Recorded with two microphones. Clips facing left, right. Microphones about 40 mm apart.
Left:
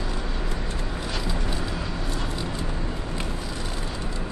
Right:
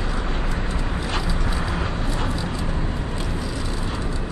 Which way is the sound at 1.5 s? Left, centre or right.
Right.